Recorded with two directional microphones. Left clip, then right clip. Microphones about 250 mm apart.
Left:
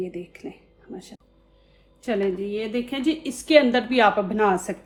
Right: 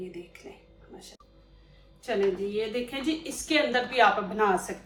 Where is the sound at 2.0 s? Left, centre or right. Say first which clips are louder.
Left 2 dB; left.